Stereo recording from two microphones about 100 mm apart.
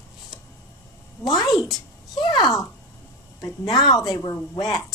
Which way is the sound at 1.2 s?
40° left (ahead or behind).